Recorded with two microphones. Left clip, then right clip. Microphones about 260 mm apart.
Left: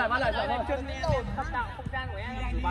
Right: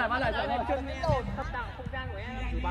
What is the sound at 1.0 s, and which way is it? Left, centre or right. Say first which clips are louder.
Speech: left 1 dB; right.